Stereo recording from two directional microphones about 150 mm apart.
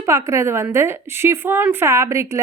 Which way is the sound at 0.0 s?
20° right (ahead or behind).